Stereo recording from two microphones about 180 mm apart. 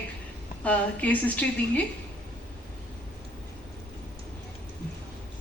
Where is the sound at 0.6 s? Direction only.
10° left (ahead or behind).